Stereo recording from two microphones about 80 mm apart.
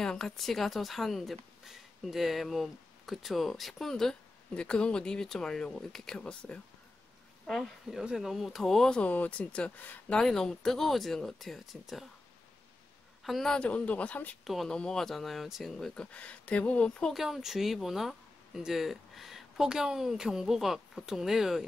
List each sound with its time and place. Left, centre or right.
0.0 s a woman's voice: centre
7.9 s speech: centre
10.2 s speech: centre
13.2 s a woman's voice: centre
13.7 s speech: centre
14.4 s speech: centre
15.9 s speech: centre
17.1 s speech: centre